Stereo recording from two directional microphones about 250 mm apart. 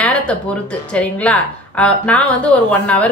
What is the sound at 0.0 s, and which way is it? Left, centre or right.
A woman's voice, centre.